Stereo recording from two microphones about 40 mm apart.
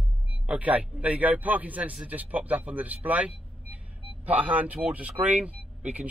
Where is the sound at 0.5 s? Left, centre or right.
Right.